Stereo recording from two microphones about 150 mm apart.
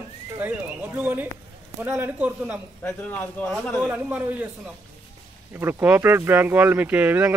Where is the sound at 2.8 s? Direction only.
10° left (ahead or behind).